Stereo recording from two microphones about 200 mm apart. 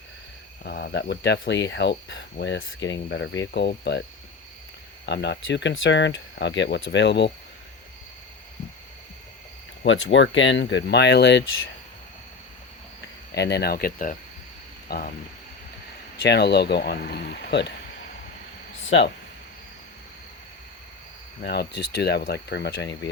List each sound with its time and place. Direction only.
0.6 s speech: 50° left (ahead or behind)
5.0 s speech: 60° left (ahead or behind)
9.8 s speech: 75° left (ahead or behind)
13.3 s speech: 55° left (ahead or behind)
16.2 s speech: 55° left (ahead or behind)
18.8 s a sound: 65° left (ahead or behind)
21.4 s speech: 55° left (ahead or behind)